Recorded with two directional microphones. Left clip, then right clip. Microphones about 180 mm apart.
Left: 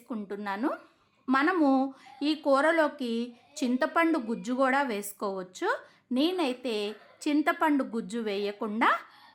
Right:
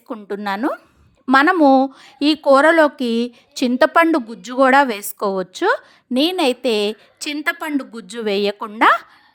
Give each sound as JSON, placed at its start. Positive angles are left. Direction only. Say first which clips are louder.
{"t": 0.1, "sound": "a woman's voice", "louder": "right 11 dB", "side_deg": -40}